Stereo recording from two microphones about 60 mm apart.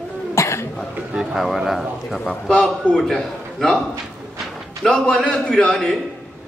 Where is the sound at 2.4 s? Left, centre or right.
Centre.